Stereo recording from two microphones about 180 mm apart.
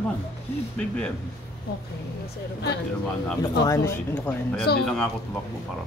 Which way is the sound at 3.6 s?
15° left (ahead or behind).